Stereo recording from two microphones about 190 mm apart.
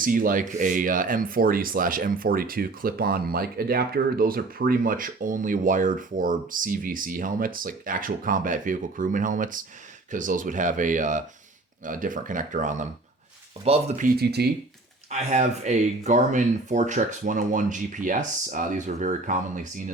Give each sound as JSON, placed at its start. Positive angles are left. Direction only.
{"t": 0.0, "sound": "speech", "side_deg": -45}
{"t": 14.2, "sound": "speech", "side_deg": -60}
{"t": 15.1, "sound": "speech", "side_deg": -40}